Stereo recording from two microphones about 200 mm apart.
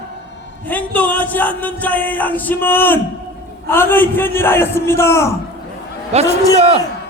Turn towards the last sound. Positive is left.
turn(degrees=-30)  # may be behind; listen again after turning